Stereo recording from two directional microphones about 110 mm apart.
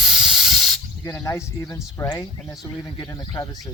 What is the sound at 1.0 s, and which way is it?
Speech, 30° left (ahead or behind).